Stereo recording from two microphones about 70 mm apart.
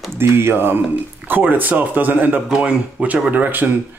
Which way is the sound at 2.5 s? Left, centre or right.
Centre.